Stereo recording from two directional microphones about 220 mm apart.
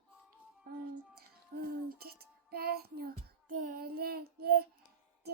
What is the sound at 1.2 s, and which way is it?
Music, 45° right (ahead or behind).